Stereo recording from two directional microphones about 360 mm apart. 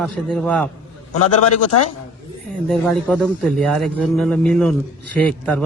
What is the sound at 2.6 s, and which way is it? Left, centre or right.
A man's voice, centre.